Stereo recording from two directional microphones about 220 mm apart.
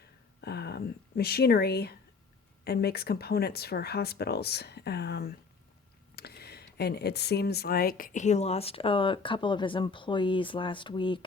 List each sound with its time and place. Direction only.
0.4 s speech: 45° left (ahead or behind); by 11.3 s 20° left (ahead or behind)